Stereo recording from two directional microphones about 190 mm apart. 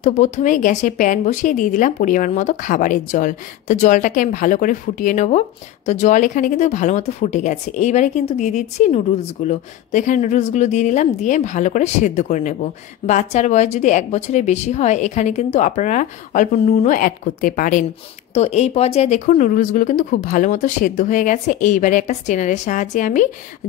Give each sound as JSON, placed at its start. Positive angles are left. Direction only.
{"t": 0.0, "sound": "speech", "side_deg": 40}
{"t": 18.3, "sound": "speech", "side_deg": 35}